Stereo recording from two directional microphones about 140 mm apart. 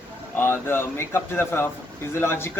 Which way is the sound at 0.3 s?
15° left (ahead or behind).